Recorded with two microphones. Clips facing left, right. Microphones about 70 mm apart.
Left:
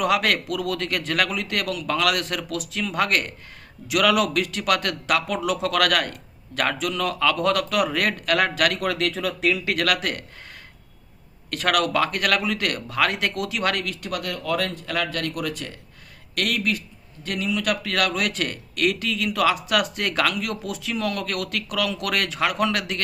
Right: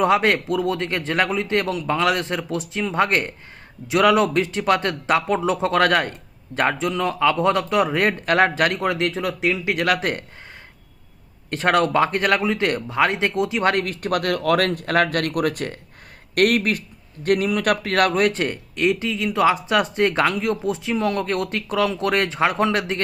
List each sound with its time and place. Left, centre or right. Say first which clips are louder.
0.0 s speech: right 4 dB; right
11.5 s speech: right 4 dB; right